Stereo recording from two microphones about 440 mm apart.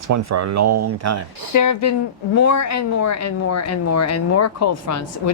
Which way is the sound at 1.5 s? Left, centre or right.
Left.